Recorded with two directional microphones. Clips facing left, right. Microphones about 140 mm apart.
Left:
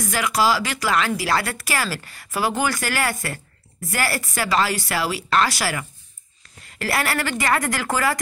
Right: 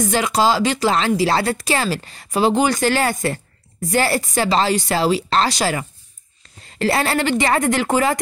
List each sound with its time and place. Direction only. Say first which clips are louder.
0.0 s speech: right 4 dB; 25° right (ahead or behind)